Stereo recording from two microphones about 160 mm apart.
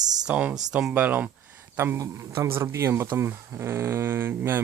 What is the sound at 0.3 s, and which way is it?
Speech, 5° right (ahead or behind).